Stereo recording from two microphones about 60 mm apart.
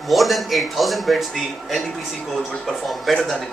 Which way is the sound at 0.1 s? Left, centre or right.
Centre.